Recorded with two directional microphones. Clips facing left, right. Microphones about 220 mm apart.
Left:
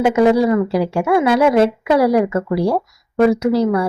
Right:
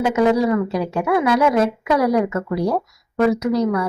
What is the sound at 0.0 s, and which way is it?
A woman's voice, 25° left (ahead or behind).